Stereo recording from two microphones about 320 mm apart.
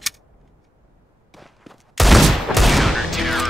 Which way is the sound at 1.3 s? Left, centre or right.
Centre.